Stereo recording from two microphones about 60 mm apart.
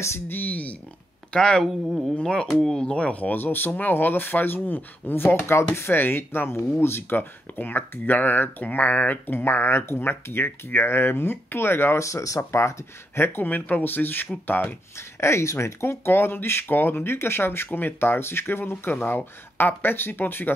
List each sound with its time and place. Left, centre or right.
0.3 s speech: left
1.3 s speech: centre; by 12.0 s left
12.0 s speech: left
13.2 s speech: left
15.0 s speech: left
16.1 s speech: left